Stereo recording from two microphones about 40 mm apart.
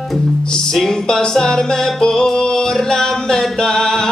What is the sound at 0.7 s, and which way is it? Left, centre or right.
Music, centre.